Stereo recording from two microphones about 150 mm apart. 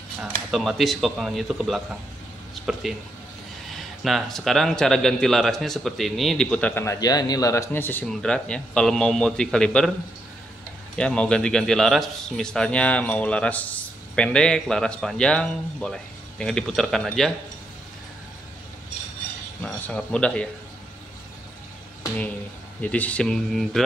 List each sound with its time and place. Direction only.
0.2 s a man's voice: centre (ahead or behind)
2.5 s a sound: centre (ahead or behind)
3.7 s a man's voice: centre (ahead or behind)
6.7 s a man's voice: 20° left (ahead or behind)
11.0 s a man's voice: 5° left (ahead or behind)
19.6 s speech: 10° left (ahead or behind)
22.8 s a man's voice: 10° left (ahead or behind)